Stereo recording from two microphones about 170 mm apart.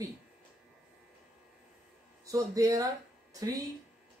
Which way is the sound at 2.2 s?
20° right (ahead or behind).